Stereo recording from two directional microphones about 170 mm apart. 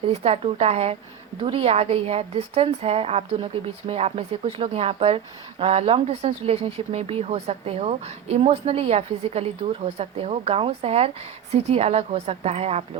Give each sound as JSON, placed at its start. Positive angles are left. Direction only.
{"t": 0.1, "sound": "a woman's voice", "side_deg": -35}